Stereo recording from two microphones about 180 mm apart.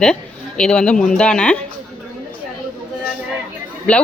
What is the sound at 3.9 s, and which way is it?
Speech, 5° left (ahead or behind).